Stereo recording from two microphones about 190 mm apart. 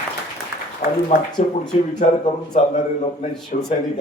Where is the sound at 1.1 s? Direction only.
40° left (ahead or behind).